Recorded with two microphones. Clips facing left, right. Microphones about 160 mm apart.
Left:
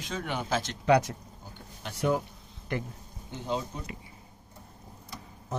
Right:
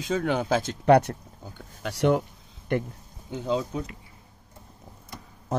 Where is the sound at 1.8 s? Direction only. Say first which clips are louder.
Right 5 dB; 75° right (ahead or behind).